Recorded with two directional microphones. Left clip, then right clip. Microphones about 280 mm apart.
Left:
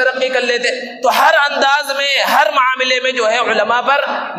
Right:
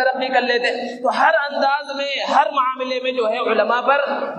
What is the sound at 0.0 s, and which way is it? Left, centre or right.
A man's voice, left.